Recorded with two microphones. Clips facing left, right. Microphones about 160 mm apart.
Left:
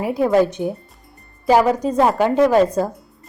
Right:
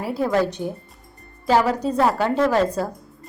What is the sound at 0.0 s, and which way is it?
A woman's voice, 15° left (ahead or behind).